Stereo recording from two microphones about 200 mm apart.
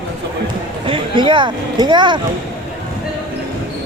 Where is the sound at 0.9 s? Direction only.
25° right (ahead or behind).